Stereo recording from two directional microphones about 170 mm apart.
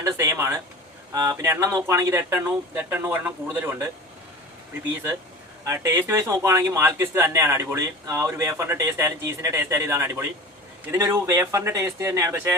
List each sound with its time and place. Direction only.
0.0 s speech: 15° right (ahead or behind)
5.6 s speech: 20° right (ahead or behind)